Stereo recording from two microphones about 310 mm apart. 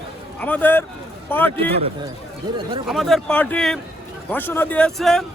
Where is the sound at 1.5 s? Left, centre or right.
Centre.